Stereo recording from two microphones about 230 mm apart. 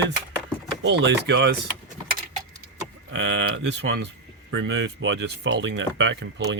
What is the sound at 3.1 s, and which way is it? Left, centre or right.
Speech, right.